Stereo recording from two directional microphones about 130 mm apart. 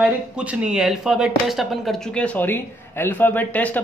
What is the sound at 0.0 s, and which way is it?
Speech, 10° right (ahead or behind).